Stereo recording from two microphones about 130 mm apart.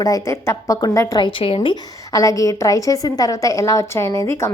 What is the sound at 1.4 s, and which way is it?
Speech, 45° left (ahead or behind).